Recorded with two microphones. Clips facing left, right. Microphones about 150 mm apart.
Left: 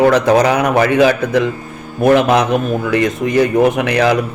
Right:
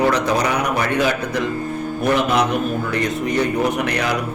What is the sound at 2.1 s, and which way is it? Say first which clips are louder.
A man's voice: left 6 dB; 90° left.